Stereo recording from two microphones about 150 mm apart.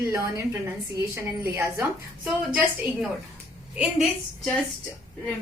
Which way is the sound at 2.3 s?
5° right (ahead or behind).